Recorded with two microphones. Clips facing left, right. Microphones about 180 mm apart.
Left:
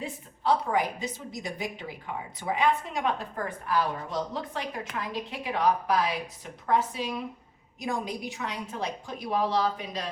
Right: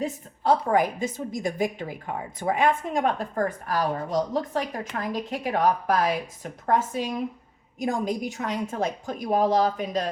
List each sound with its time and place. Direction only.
0.0 s a woman's voice: 45° right (ahead or behind)